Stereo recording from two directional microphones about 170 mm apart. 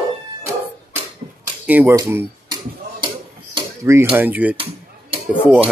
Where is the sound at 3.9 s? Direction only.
15° right (ahead or behind).